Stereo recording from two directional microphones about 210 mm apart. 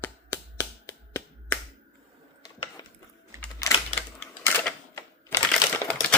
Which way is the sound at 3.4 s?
5° left (ahead or behind).